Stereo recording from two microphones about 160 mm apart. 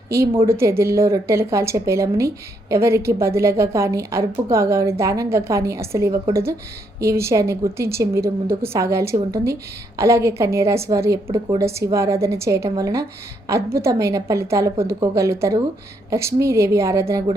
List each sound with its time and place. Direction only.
0.4 s a woman's voice: 15° right (ahead or behind)